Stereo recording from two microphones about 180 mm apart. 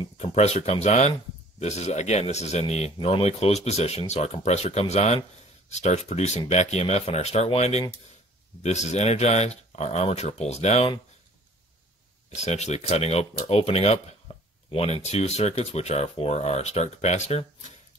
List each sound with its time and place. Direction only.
0.0 s speech: 35° left (ahead or behind)
12.4 s speech: 40° left (ahead or behind)